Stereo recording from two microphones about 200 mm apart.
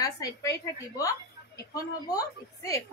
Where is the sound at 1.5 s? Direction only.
15° left (ahead or behind).